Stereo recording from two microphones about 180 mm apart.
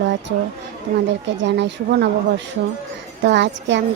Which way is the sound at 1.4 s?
80° right.